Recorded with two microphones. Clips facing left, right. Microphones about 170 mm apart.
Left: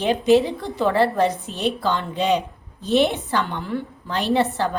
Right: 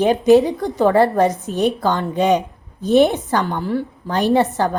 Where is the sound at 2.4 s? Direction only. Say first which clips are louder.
Right 3 dB; 20° right (ahead or behind).